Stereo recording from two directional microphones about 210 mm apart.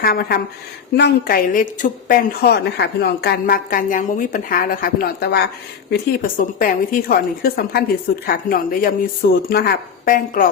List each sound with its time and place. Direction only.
0.0 s a woman's voice: 45° left (ahead or behind)